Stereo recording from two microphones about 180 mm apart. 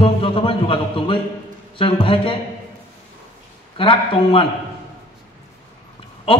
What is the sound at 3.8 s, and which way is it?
Speech, 30° left (ahead or behind).